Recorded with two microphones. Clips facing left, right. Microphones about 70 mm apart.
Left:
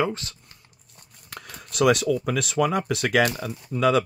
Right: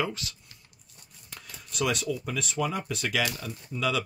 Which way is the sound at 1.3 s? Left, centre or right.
Left.